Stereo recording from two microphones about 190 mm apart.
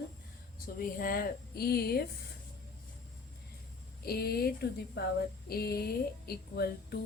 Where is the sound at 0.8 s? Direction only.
50° left (ahead or behind).